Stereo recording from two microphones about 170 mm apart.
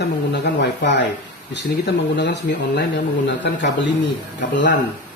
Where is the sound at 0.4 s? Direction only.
90° left.